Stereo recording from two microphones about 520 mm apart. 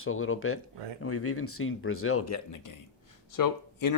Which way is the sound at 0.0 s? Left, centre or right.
Left.